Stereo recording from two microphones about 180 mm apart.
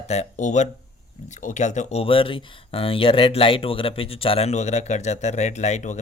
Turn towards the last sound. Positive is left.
turn(degrees=40)  # may be behind; listen again after turning